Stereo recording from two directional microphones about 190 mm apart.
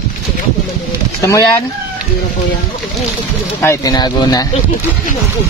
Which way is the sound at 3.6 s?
20° left (ahead or behind).